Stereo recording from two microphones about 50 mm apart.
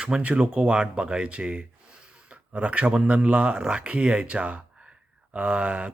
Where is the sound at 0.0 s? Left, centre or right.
Right.